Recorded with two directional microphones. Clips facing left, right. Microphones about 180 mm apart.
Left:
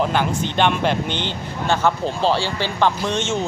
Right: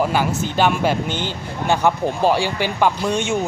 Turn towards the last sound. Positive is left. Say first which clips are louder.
# right 2 dB
turn(degrees=-10)  # may be behind; listen again after turning